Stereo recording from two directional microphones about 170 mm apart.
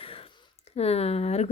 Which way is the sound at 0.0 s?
35° left (ahead or behind).